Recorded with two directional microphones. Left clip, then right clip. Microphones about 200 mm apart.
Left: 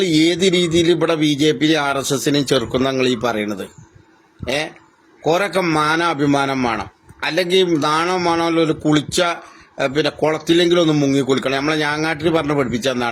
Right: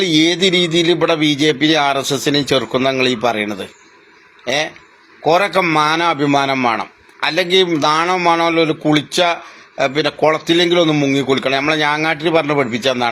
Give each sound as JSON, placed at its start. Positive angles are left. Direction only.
{"t": 0.0, "sound": "a man's voice", "side_deg": 15}